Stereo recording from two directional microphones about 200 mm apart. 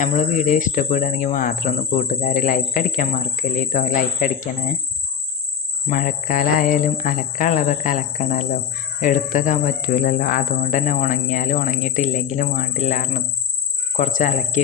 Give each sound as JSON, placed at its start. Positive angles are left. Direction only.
{"t": 0.0, "sound": "speech", "side_deg": 35}
{"t": 5.9, "sound": "speech", "side_deg": 45}